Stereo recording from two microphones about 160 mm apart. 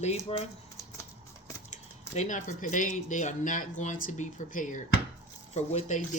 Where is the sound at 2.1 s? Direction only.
55° left (ahead or behind).